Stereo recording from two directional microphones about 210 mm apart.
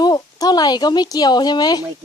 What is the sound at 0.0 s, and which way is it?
Speech, 20° left (ahead or behind).